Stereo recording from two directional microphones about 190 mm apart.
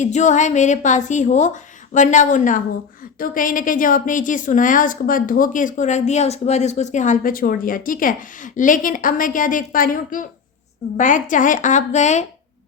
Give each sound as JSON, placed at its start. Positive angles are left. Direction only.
{"t": 0.0, "sound": "a woman's voice", "side_deg": 40}